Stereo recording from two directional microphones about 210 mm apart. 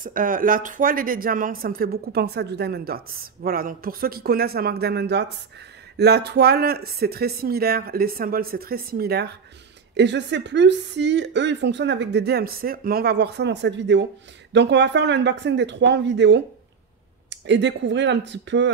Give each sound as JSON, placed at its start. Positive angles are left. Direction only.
{"t": 0.0, "sound": "speech", "side_deg": -40}